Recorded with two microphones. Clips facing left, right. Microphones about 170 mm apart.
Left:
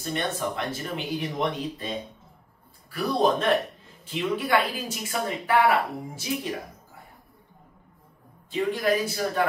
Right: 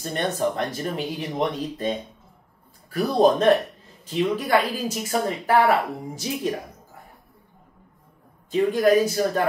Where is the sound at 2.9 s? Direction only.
40° right (ahead or behind).